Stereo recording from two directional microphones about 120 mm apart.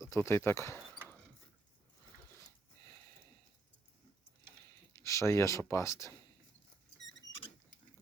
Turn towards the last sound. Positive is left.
turn(degrees=30)  # may be behind; listen again after turning